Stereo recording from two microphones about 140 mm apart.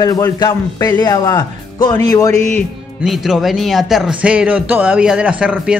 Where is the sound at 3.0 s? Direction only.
Centre (ahead or behind).